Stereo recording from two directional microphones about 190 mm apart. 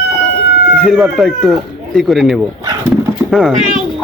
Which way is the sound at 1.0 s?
Centre (ahead or behind).